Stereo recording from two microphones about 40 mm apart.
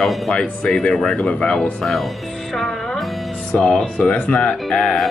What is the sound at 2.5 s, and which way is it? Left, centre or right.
Music, centre.